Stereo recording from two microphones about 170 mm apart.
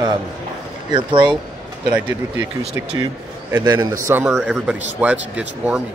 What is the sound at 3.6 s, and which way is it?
Speech, 20° right (ahead or behind).